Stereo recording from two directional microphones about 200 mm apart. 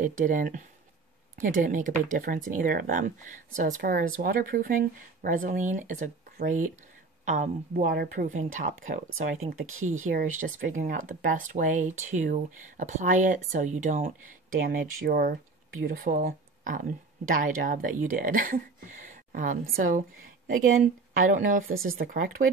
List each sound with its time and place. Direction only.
0.0 s speech: 40° right (ahead or behind)
9.4 s speech: 90° right
10.0 s speech: 40° right (ahead or behind)